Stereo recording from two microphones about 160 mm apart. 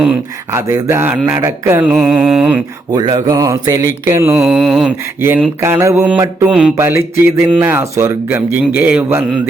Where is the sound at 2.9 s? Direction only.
25° right (ahead or behind).